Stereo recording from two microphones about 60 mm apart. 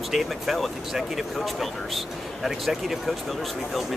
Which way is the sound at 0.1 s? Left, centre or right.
Centre.